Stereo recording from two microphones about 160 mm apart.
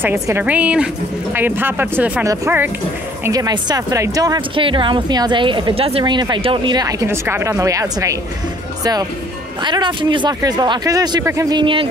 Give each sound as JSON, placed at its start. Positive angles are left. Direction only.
{"t": 0.0, "sound": "speech", "side_deg": -15}
{"t": 9.6, "sound": "speech", "side_deg": -30}